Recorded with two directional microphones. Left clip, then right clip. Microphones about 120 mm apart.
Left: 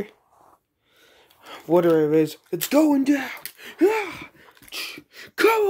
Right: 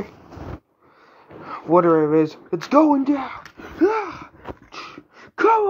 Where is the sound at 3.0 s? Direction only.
55° left (ahead or behind).